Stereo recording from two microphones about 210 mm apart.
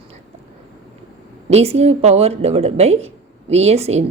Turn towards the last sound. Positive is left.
turn(degrees=-30)  # may be behind; listen again after turning